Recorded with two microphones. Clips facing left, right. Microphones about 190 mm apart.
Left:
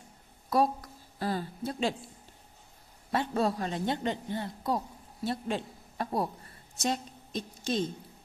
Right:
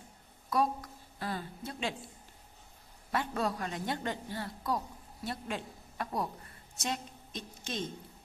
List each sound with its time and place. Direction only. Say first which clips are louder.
0.5 s a woman's voice: left 4 dB; 35° left (ahead or behind)
3.1 s a woman's voice: left 4 dB; 30° left (ahead or behind)